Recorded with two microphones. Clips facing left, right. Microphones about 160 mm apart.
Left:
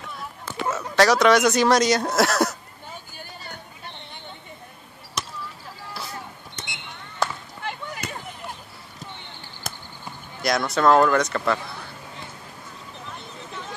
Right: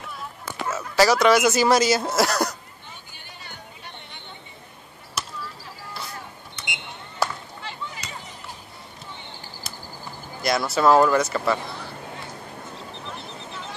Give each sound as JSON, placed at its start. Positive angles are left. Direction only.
{"t": 0.7, "sound": "speech", "side_deg": -5}
{"t": 5.2, "sound": "a sound", "side_deg": -5}
{"t": 6.6, "sound": "a sound", "side_deg": 40}
{"t": 7.2, "sound": "chop", "side_deg": -10}
{"t": 7.6, "sound": "chop", "side_deg": 55}
{"t": 10.4, "sound": "speech", "side_deg": -5}